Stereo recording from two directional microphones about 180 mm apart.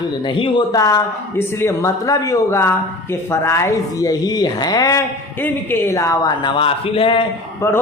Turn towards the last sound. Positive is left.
turn(degrees=15)  # may be behind; listen again after turning